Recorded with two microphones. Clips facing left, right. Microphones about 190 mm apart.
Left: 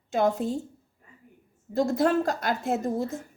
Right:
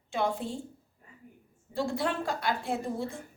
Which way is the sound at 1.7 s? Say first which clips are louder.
Left 7 dB; 40° left (ahead or behind).